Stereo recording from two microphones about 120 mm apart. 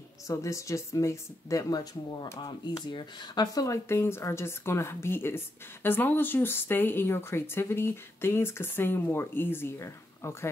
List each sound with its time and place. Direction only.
0.3 s speech: 25° left (ahead or behind)